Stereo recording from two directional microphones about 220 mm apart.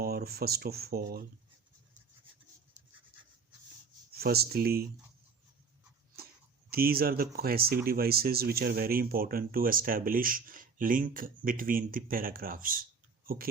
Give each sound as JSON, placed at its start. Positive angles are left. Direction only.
{"t": 0.0, "sound": "speech", "side_deg": -45}
{"t": 4.1, "sound": "speech", "side_deg": -45}
{"t": 6.7, "sound": "speech", "side_deg": -45}